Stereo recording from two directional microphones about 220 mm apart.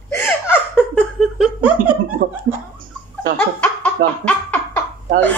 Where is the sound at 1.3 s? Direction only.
Centre (ahead or behind).